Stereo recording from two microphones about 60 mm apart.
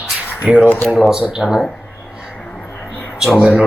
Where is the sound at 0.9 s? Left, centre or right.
Centre.